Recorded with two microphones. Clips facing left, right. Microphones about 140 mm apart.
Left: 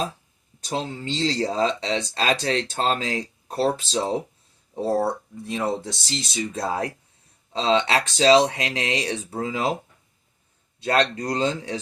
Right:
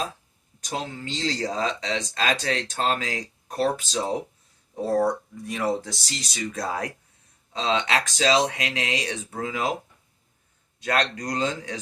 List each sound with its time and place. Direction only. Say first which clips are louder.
0.6 s speech: left 3 dB; 30° left (ahead or behind)
10.8 s speech: left 4 dB; 30° left (ahead or behind)